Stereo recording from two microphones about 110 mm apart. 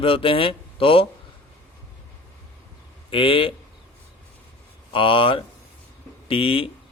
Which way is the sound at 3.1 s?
55° left (ahead or behind).